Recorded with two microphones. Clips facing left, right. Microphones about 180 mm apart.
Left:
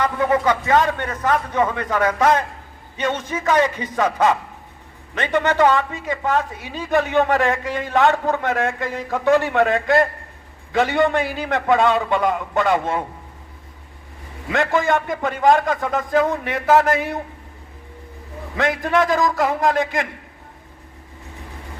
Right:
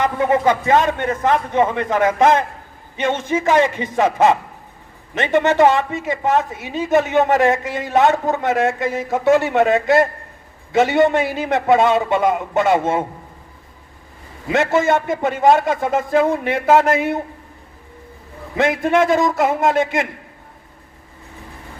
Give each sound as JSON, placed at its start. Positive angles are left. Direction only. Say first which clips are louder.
{"t": 0.0, "sound": "a woman's voice", "louder": "right 2 dB", "side_deg": -25}
{"t": 5.1, "sound": "a woman's voice", "louder": "right 4 dB", "side_deg": -25}
{"t": 14.5, "sound": "a woman's voice", "louder": "right 3 dB", "side_deg": -20}
{"t": 18.5, "sound": "a woman's voice", "louder": "right 3 dB", "side_deg": -25}